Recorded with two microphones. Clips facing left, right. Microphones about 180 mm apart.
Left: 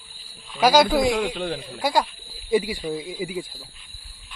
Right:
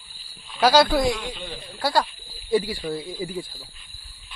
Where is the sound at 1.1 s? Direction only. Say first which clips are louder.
Left 9 dB; 85° left.